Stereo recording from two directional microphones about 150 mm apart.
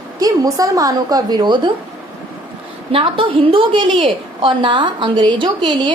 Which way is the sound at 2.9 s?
35° right (ahead or behind).